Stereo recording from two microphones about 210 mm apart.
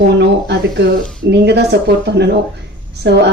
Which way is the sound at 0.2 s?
55° right (ahead or behind).